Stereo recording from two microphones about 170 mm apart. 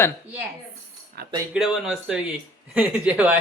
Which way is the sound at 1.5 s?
Centre (ahead or behind).